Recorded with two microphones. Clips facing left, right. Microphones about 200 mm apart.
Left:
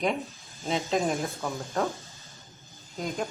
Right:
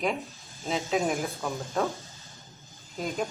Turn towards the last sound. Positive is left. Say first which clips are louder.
# right 1 dB
turn(degrees=0)  # may be behind; listen again after turning